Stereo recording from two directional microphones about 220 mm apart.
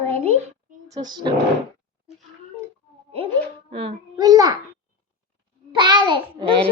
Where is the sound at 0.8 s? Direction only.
15° right (ahead or behind).